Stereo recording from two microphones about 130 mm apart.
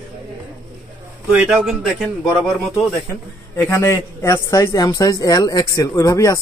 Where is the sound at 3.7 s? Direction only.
25° left (ahead or behind).